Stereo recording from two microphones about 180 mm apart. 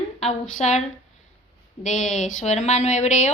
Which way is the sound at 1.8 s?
40° left (ahead or behind).